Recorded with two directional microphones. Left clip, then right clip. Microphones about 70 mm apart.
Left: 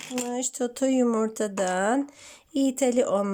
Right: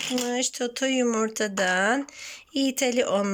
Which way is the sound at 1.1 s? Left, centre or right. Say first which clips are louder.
Right 1 dB; left.